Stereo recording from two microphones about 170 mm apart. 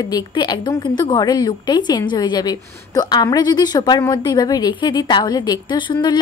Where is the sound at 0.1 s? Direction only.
25° left (ahead or behind).